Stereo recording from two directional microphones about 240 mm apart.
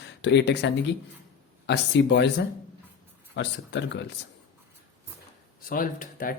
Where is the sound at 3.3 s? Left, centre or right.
Left.